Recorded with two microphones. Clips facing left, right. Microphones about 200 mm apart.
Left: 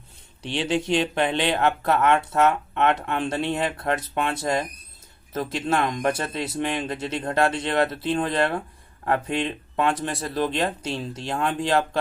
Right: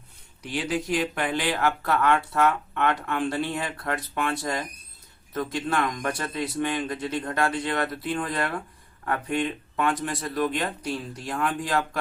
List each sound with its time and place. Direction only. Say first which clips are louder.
0.4 s speech: left 3 dB; 25° left (ahead or behind)